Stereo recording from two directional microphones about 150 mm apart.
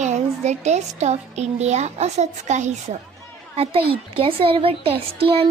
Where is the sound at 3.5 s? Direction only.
40° right (ahead or behind).